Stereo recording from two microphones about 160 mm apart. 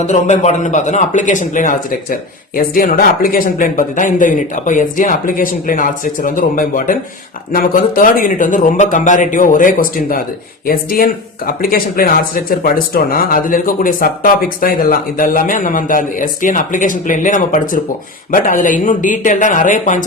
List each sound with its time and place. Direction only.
0.0 s a man's voice: 45° left (ahead or behind)